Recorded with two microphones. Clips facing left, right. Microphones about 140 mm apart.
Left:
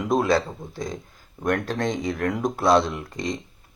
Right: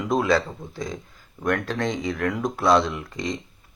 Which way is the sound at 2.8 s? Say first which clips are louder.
Left 1 dB; 40° left (ahead or behind).